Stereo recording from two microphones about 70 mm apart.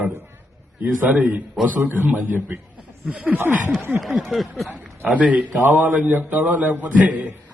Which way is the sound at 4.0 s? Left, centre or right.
Centre.